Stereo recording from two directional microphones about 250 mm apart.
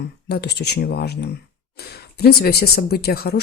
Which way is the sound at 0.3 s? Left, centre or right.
Left.